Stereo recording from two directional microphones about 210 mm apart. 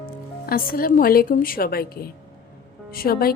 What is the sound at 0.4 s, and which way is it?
A woman's voice, 45° left (ahead or behind).